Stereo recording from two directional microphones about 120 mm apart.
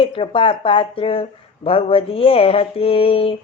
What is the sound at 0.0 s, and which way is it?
Speech, 45° left (ahead or behind).